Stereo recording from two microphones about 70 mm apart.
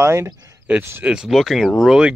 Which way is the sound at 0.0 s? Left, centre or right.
Right.